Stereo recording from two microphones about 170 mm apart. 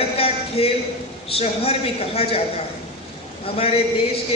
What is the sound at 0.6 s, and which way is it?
A man's voice, 35° left (ahead or behind).